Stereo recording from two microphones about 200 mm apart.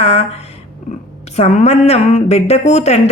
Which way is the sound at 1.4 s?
35° left (ahead or behind).